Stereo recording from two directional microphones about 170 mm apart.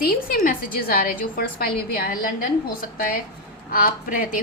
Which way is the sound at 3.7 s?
60° left (ahead or behind).